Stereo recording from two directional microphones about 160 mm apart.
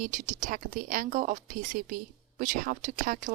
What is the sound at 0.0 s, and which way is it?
Speech, 55° right (ahead or behind).